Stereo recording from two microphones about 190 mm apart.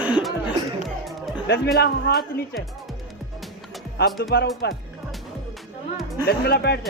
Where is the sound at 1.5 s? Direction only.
60° left (ahead or behind).